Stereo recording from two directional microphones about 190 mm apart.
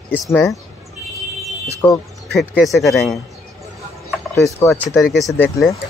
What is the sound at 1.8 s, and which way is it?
Speech, 5° left (ahead or behind).